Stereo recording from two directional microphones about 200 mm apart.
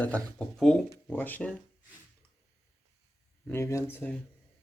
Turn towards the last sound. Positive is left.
turn(degrees=10)  # may be behind; listen again after turning